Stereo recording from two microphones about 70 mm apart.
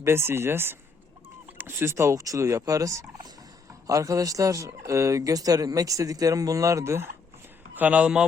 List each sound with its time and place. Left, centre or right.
0.0 s speech: right
7.8 s speech: centre